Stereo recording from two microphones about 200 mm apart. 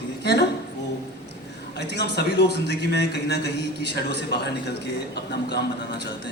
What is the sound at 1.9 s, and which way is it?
A man's voice, 55° left (ahead or behind).